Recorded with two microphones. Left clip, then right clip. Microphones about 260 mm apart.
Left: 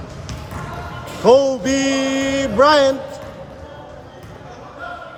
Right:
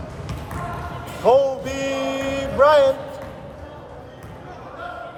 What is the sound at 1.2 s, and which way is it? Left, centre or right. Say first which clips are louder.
Music: left 4 dB; left.